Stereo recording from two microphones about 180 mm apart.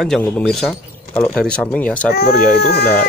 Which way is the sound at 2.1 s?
60° left (ahead or behind).